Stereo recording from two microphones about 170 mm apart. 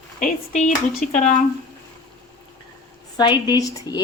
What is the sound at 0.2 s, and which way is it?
Speech, 50° left (ahead or behind).